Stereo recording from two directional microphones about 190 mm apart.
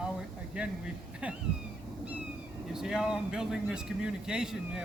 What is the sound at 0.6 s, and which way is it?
Speech, 5° right (ahead or behind).